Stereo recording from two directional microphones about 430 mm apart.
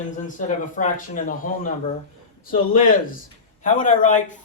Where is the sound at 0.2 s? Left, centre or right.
Centre.